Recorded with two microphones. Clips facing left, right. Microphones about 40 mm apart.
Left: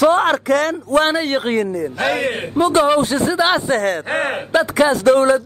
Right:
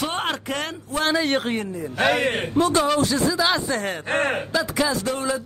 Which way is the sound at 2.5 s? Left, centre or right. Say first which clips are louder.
Left 7 dB; left.